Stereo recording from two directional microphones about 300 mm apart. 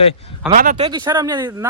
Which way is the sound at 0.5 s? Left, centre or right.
Right.